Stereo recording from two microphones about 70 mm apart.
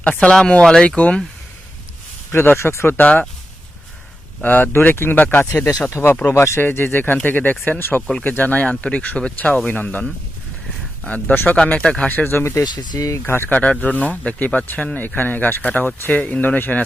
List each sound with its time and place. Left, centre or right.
0.0 s speech: centre
2.3 s speech: left
4.4 s speech: left
6.6 s speech: left
12.6 s speech: left
13.0 s speech: left
13.2 s speech: left
13.6 s speech: left